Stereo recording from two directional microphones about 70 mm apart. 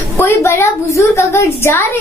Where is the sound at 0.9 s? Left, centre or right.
Left.